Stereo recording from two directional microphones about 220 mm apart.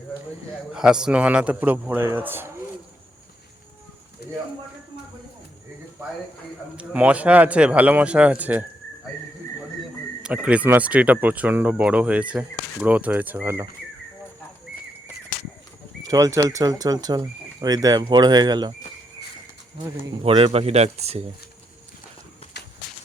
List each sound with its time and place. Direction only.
0.7 s speech: 5° right (ahead or behind)
4.2 s a sound: 45° left (ahead or behind)
6.7 s speech: 5° right (ahead or behind)
10.2 s speech: 5° right (ahead or behind)
16.0 s speech: 15° right (ahead or behind)
20.2 s speech: 25° right (ahead or behind)
22.5 s walk: 50° left (ahead or behind)